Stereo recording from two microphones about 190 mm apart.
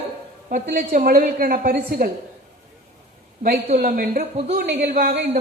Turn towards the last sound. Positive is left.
turn(degrees=-50)  # may be behind; listen again after turning